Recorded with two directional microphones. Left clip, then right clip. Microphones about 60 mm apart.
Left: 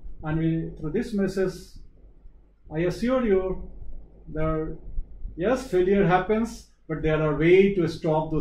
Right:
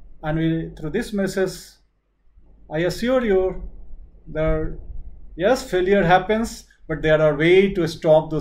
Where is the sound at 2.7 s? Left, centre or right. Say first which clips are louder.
Right 4 dB; right.